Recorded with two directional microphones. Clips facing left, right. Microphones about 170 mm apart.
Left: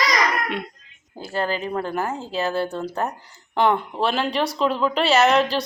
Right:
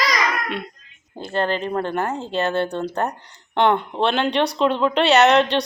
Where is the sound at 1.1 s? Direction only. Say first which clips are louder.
Right 3 dB; 5° left (ahead or behind).